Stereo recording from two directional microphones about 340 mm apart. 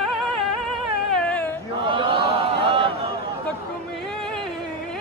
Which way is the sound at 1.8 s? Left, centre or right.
Centre.